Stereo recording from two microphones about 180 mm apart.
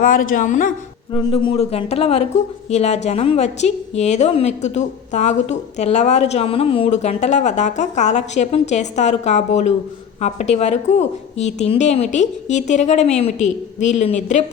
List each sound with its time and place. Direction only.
0.0 s speech: 50° left (ahead or behind)
1.1 s speech: 30° left (ahead or behind)